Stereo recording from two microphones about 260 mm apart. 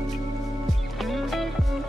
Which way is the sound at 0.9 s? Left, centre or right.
Centre.